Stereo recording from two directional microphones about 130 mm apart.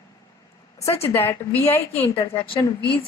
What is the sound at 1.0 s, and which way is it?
A woman's voice, 15° left (ahead or behind).